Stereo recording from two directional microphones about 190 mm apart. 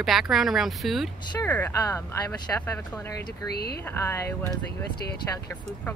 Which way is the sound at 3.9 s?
15° left (ahead or behind).